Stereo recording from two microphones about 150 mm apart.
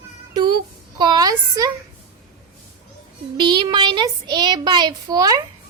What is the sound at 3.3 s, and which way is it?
A woman's voice, 30° right (ahead or behind).